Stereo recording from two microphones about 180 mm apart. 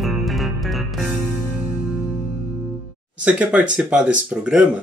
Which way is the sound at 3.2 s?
5° right (ahead or behind).